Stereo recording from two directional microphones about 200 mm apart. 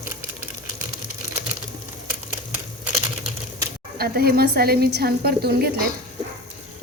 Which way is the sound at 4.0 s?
50° right (ahead or behind).